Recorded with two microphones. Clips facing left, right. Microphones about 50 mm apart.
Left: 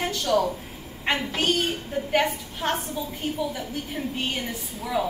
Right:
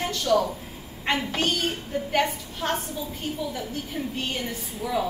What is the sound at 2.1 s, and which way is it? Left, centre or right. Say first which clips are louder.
Speech: left 1 dB; centre.